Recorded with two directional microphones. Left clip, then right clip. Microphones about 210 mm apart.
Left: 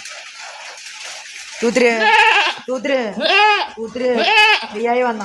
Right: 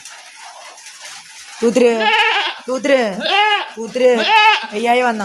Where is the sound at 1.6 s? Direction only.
25° right (ahead or behind).